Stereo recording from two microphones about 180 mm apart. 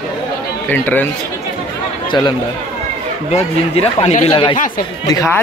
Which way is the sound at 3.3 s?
35° left (ahead or behind).